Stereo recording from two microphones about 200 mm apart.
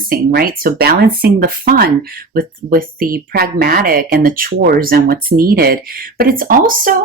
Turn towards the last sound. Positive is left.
turn(degrees=-45)  # may be behind; listen again after turning